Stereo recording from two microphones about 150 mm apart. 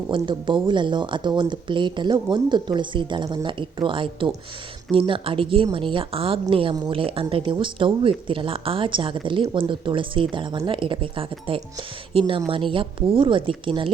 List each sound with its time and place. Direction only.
0.1 s speech: 35° right (ahead or behind)